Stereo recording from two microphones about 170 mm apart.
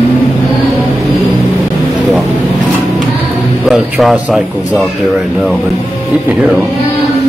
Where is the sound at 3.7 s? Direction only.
Centre (ahead or behind).